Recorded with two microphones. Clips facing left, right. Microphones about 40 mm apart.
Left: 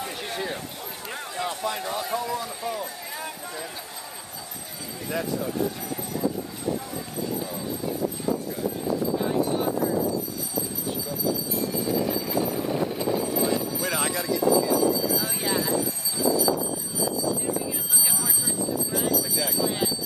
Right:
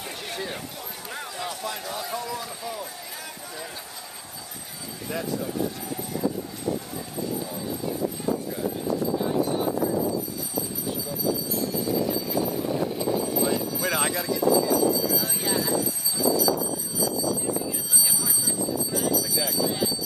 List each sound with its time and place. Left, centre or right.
0.0 s a sound: centre
2.6 s run: centre
5.0 s speech: centre
13.4 s speech: centre
18.9 s a sound: centre
19.6 s speech: centre